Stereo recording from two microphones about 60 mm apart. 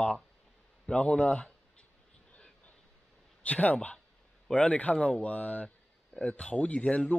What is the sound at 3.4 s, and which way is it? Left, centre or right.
Speech, left.